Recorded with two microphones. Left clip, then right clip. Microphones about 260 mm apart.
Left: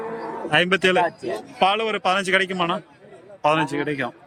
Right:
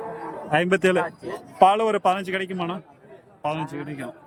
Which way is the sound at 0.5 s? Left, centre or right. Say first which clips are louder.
Left 2 dB; centre.